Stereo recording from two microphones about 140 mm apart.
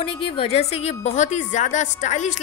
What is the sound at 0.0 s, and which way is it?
A woman's voice, 45° left (ahead or behind).